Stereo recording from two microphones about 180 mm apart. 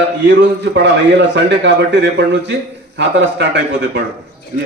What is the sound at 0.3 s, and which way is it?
A man's voice, 75° right (ahead or behind).